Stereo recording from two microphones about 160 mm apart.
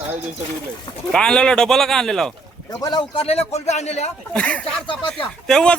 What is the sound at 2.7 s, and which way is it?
Speech, 25° left (ahead or behind).